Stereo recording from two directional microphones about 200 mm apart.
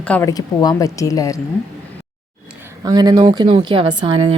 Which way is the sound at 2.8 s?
20° right (ahead or behind).